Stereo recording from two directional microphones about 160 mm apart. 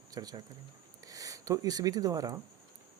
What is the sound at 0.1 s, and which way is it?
Speech, 25° right (ahead or behind).